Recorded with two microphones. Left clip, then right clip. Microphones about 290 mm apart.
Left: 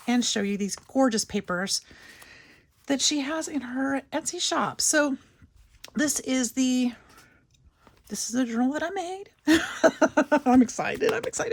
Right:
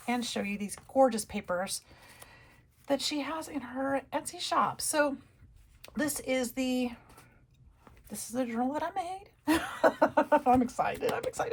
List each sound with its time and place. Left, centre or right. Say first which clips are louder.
0.0 s speech: left 7 dB; left
8.2 s speech: left 5 dB; left